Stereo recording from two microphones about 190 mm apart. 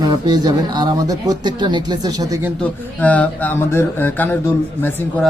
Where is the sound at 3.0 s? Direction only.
10° left (ahead or behind).